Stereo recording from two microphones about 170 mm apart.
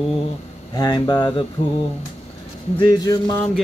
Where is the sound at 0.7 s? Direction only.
25° left (ahead or behind).